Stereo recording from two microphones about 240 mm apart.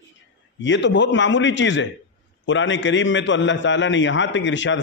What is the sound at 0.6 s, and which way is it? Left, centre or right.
A man's voice, left.